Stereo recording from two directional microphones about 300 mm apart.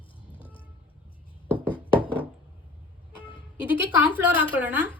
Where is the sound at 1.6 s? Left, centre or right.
Centre.